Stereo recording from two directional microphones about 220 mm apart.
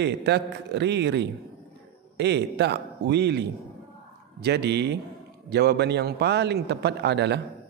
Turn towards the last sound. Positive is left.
turn(degrees=-50)  # may be behind; listen again after turning